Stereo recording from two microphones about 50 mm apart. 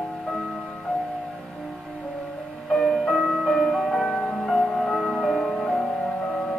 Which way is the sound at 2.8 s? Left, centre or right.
Centre.